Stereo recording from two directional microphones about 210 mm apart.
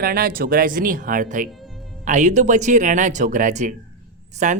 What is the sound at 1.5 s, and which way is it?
Music, centre (ahead or behind).